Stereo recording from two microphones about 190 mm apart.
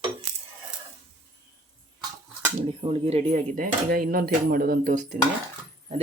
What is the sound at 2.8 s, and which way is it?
Speech, 30° right (ahead or behind).